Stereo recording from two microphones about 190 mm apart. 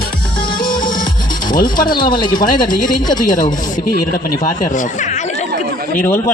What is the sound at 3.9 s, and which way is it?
Speech, 50° left (ahead or behind).